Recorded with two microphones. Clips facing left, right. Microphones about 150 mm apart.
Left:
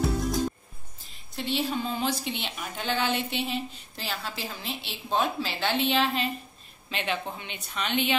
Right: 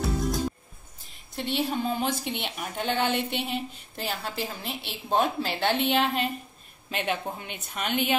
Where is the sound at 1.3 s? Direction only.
55° right (ahead or behind).